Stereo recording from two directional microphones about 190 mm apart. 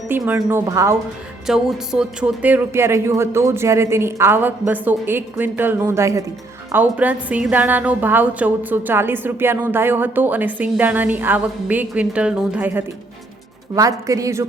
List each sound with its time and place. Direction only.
0.4 s a woman's voice: 10° right (ahead or behind)
1.5 s a woman's voice: 5° right (ahead or behind)